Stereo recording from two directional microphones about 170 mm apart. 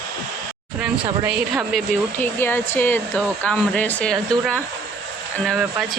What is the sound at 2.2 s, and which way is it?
Speech, 15° left (ahead or behind).